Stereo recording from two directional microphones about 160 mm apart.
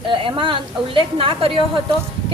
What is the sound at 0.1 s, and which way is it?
A woman's voice, 30° right (ahead or behind).